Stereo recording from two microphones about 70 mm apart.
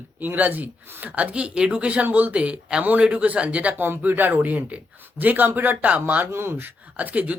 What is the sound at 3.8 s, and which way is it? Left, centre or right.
Speech, right.